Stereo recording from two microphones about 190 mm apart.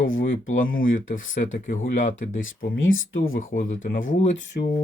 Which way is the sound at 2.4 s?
90° left.